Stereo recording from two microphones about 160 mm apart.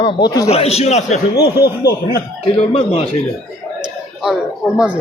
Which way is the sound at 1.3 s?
80° left.